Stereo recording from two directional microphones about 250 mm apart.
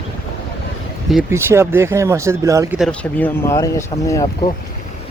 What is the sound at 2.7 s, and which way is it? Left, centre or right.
Speech, centre.